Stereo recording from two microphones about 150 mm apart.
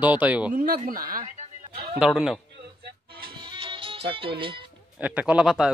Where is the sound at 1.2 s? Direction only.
50° right (ahead or behind).